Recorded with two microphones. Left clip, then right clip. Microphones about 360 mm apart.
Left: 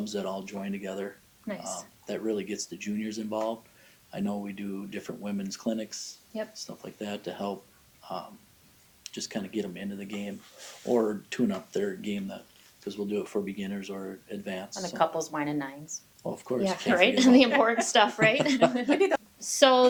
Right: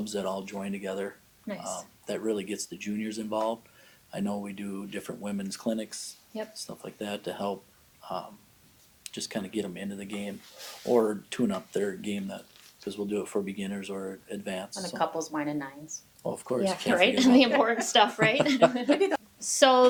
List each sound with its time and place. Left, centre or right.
0.0 s speech: left
1.5 s speech: left
2.0 s speech: left
14.9 s a woman's voice: left
16.2 s speech: left
16.9 s speech: left
18.9 s a woman's voice: left
19.4 s speech: centre